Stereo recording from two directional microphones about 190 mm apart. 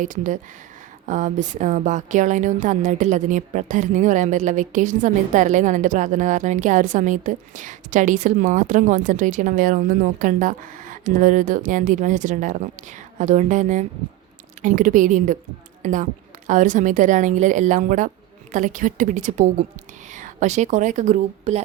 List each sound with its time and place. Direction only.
0.0 s a woman's voice: 40° right (ahead or behind)